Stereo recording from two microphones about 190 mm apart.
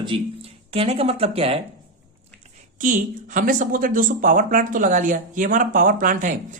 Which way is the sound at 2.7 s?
40° right (ahead or behind).